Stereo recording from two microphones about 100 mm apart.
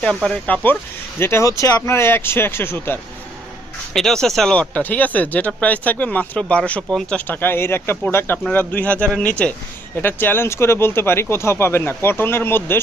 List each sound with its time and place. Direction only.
0.4 s speech: 15° left (ahead or behind)
3.9 s speech: 5° left (ahead or behind)
4.7 s speech: 15° left (ahead or behind)
7.3 s speech: 20° left (ahead or behind)